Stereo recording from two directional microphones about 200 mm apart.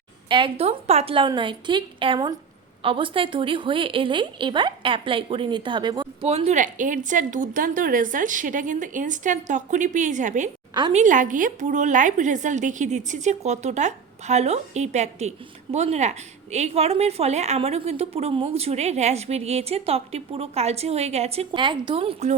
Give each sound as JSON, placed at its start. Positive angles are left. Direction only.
{"t": 0.3, "sound": "a woman's voice", "side_deg": -25}
{"t": 6.2, "sound": "a woman's voice", "side_deg": -30}